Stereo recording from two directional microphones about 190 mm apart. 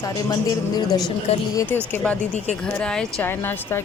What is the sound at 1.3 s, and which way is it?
Speech, 35° left (ahead or behind).